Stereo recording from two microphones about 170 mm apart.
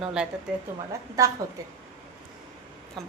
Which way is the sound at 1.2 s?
20° right (ahead or behind).